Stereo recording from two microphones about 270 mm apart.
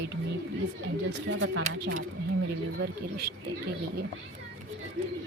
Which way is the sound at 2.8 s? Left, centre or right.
Right.